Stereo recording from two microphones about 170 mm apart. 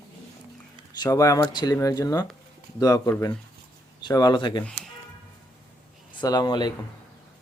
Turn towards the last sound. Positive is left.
turn(degrees=25)  # may be behind; listen again after turning